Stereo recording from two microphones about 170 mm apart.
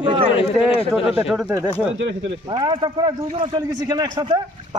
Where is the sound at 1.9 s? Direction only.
90° right.